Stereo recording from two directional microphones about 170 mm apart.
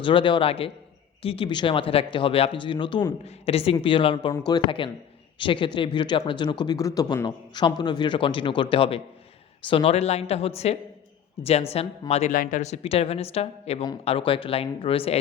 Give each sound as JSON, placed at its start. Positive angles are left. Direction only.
{"t": 0.0, "sound": "a man's voice", "side_deg": 30}